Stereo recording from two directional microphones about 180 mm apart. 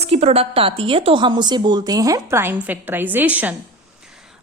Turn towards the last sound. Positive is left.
turn(degrees=-10)  # may be behind; listen again after turning